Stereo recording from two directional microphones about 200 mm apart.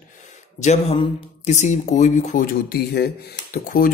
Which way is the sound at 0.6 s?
30° left (ahead or behind).